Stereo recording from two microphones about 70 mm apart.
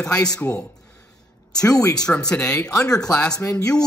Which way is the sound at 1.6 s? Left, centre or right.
Left.